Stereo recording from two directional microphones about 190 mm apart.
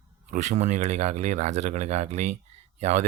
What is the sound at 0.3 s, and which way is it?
Speech, 40° right (ahead or behind).